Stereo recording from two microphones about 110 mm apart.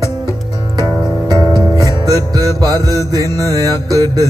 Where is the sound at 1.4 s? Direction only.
35° right (ahead or behind).